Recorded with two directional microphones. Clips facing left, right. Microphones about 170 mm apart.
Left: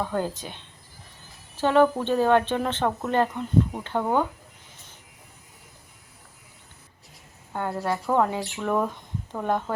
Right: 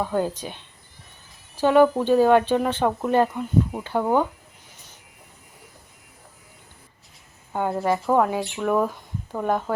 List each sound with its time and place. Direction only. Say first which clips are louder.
0.0 s speech: right 3 dB; 10° right (ahead or behind)
7.5 s speech: right 4 dB; 15° right (ahead or behind)
8.0 s speech: even; 10° right (ahead or behind)